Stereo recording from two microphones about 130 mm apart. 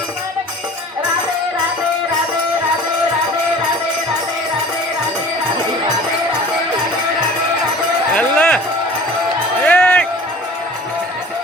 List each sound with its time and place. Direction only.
8.1 s cowbell: 10° left (ahead or behind)
9.6 s music: 10° left (ahead or behind)